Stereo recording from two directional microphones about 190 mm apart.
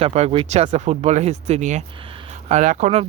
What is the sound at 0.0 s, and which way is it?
Speech, 30° right (ahead or behind).